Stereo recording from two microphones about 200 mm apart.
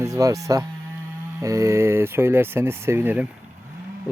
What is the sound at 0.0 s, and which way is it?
Moo, 15° right (ahead or behind).